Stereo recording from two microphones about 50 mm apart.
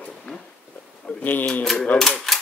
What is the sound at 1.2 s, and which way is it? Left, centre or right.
Speech, left.